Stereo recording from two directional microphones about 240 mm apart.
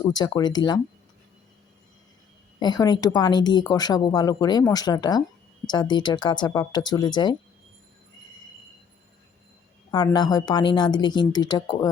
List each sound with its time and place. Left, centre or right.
0.0 s a woman's voice: centre
2.6 s a woman's voice: centre
9.9 s a woman's voice: centre